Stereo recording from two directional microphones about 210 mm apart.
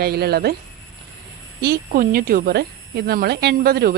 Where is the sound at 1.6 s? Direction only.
45° right (ahead or behind).